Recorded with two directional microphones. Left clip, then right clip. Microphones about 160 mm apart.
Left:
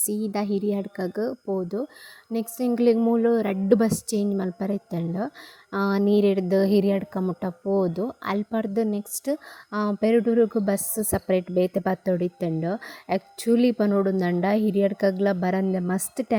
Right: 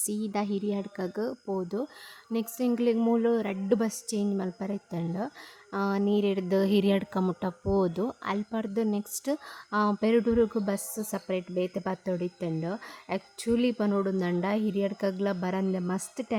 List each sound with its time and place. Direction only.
0.0 s speech: 15° left (ahead or behind); by 6.4 s 30° left (ahead or behind)
6.5 s speech: 15° left (ahead or behind)
8.2 s speech: 25° left (ahead or behind)